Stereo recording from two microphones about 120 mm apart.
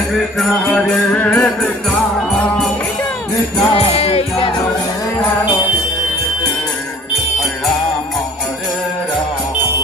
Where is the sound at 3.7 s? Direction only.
55° left (ahead or behind).